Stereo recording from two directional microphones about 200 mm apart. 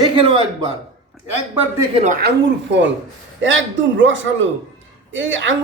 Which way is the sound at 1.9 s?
35° right (ahead or behind).